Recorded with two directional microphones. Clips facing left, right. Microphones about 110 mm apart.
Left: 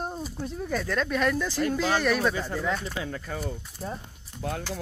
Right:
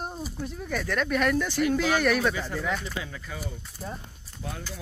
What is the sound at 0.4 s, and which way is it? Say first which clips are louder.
Speech: left 2 dB; 30° left (ahead or behind).